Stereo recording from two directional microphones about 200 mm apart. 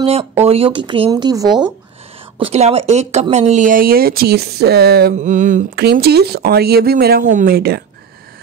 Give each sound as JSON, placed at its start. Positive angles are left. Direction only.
{"t": 0.0, "sound": "speech", "side_deg": -30}
{"t": 2.3, "sound": "speech", "side_deg": -30}
{"t": 5.1, "sound": "a sound", "side_deg": -40}
{"t": 5.9, "sound": "speech", "side_deg": -55}